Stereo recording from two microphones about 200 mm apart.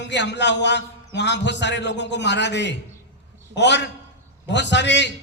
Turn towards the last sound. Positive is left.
turn(degrees=60)  # may be behind; listen again after turning